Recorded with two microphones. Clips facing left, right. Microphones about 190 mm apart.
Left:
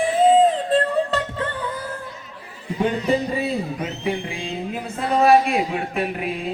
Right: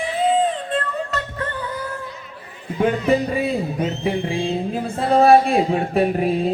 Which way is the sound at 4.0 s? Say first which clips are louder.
Right 3 dB; 30° right (ahead or behind).